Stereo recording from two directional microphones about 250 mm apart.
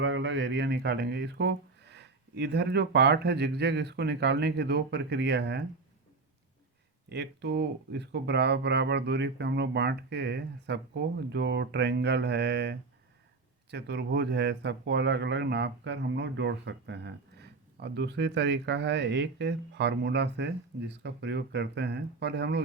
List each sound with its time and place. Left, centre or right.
0.0 s speech: right
7.1 s speech: right